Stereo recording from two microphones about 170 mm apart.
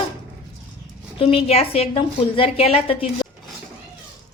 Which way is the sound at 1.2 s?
35° left (ahead or behind).